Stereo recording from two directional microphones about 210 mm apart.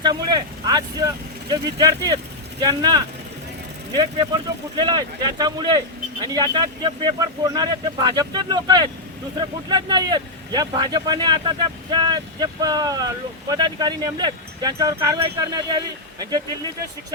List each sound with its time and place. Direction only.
0.0 s speech: 20° right (ahead or behind)